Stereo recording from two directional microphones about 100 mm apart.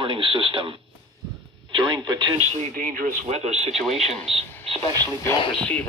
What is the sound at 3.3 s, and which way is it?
Speech, 90° right.